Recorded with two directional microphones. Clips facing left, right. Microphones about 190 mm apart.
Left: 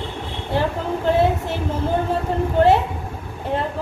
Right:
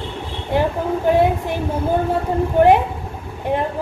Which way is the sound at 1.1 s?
15° right (ahead or behind).